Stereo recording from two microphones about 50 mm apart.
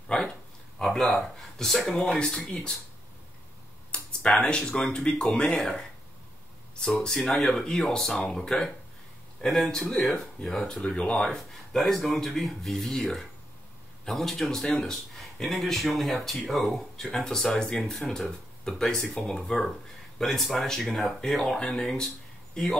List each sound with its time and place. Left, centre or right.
0.1 s speech: centre
2.0 s speech: centre
4.2 s speech: left
4.6 s speech: centre
6.8 s speech: centre
11.2 s speech: centre